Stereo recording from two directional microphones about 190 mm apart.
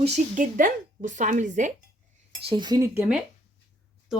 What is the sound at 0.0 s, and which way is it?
Speech, 45° right (ahead or behind).